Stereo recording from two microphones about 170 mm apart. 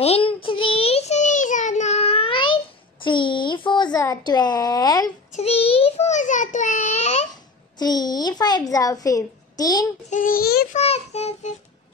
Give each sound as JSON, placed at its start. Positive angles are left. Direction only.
{"t": 0.0, "sound": "child singing", "side_deg": 35}
{"t": 5.3, "sound": "a sound", "side_deg": 35}
{"t": 7.8, "sound": "a child's voice", "side_deg": 25}
{"t": 10.0, "sound": "child singing", "side_deg": 50}
{"t": 10.7, "sound": "a child's voice", "side_deg": 40}